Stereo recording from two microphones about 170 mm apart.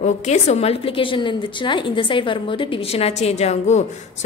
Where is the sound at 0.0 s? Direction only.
40° left (ahead or behind).